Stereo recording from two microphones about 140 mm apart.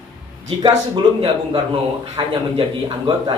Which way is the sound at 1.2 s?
35° right (ahead or behind).